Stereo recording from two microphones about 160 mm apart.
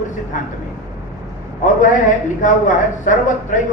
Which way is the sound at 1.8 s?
55° left (ahead or behind).